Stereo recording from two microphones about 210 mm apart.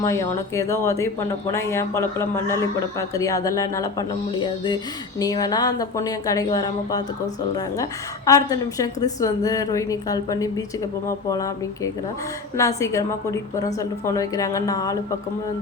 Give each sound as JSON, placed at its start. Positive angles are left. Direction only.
{"t": 0.0, "sound": "speech", "side_deg": 15}